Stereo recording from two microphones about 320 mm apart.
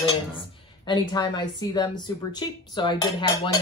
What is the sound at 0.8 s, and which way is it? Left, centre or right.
Speech, centre.